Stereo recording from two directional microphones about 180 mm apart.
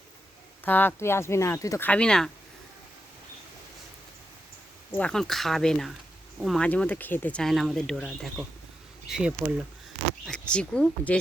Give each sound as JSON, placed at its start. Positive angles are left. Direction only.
{"t": 0.6, "sound": "speech", "side_deg": 10}
{"t": 1.9, "sound": "speech", "side_deg": 5}
{"t": 4.9, "sound": "speech", "side_deg": 5}